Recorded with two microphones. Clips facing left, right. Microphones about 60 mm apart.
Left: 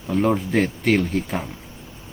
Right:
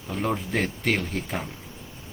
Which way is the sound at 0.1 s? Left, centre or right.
Centre.